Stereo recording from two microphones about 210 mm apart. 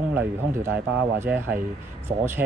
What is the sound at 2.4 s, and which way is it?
Speech, 55° right (ahead or behind).